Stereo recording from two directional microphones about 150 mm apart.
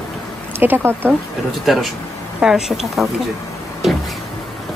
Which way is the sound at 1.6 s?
Centre (ahead or behind).